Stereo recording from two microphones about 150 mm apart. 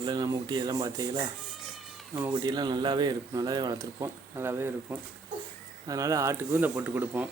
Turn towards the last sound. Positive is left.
turn(degrees=-10)  # may be behind; listen again after turning